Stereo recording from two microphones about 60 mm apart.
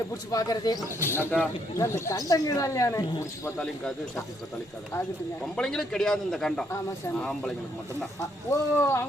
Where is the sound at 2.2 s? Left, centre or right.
Left.